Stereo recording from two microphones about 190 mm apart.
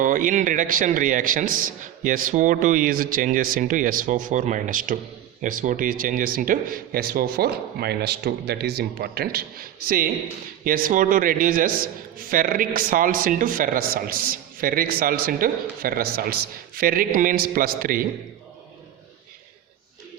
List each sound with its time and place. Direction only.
0.0 s a man's voice: 45° right (ahead or behind)